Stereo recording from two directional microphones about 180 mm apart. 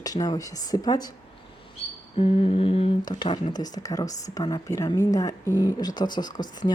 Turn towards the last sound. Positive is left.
turn(degrees=25)  # may be behind; listen again after turning